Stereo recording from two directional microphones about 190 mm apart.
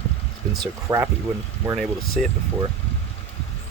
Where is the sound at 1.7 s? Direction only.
Centre (ahead or behind).